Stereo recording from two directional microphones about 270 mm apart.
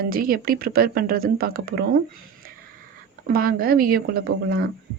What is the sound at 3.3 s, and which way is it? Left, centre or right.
A woman's voice, right.